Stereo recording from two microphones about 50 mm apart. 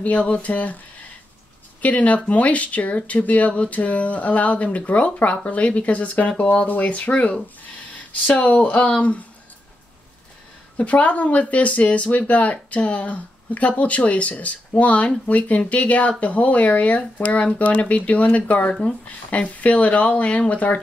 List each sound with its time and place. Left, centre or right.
0.0 s speech: left
8.4 s speech: left
10.8 s speech: left